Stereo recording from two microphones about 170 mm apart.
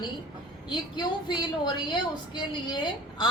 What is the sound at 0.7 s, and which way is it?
A woman's voice, 25° left (ahead or behind).